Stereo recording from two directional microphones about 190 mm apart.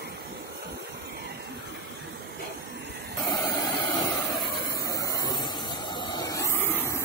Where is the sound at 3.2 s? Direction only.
15° left (ahead or behind).